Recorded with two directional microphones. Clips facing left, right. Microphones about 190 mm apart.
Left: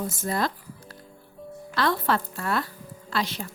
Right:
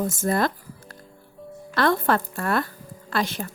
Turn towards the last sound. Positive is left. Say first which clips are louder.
# right 3 dB
turn(degrees=-50)  # may be behind; listen again after turning